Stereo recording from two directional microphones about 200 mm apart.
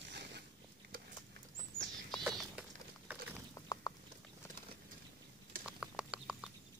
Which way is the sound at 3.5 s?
20° left (ahead or behind).